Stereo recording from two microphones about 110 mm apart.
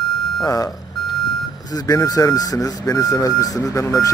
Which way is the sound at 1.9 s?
35° left (ahead or behind).